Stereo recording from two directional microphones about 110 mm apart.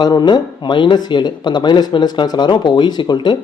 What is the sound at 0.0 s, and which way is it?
Speech, 40° left (ahead or behind).